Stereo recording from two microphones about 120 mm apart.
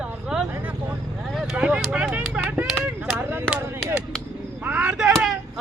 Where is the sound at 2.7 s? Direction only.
5° right (ahead or behind).